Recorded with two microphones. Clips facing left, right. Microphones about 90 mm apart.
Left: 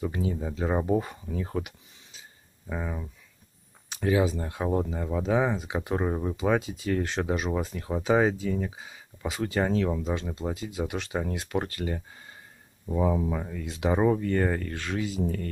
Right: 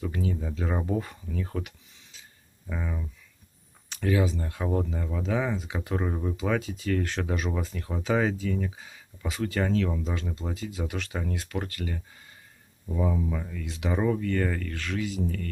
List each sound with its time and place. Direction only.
0.0 s speech: 20° left (ahead or behind)
2.7 s speech: 20° left (ahead or behind)